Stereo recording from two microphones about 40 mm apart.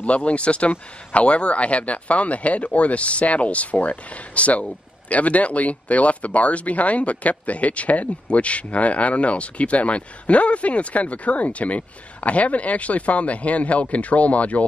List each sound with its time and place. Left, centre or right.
0.0 s speech: left